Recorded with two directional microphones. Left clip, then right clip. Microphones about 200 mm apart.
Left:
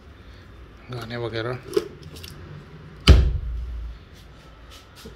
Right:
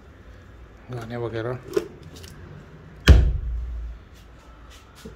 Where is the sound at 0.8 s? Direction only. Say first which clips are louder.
Even; 15° right (ahead or behind).